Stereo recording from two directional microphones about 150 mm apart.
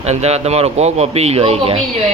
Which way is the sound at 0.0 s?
45° right (ahead or behind).